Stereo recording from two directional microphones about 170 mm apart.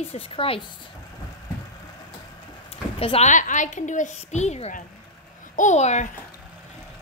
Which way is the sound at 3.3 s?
45° left (ahead or behind).